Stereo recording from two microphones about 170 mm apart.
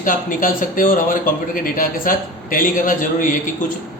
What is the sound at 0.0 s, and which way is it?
A man's voice, 55° left (ahead or behind).